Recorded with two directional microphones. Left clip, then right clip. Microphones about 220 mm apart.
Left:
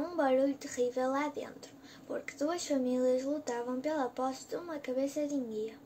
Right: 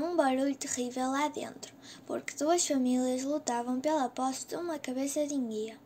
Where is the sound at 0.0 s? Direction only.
45° right (ahead or behind).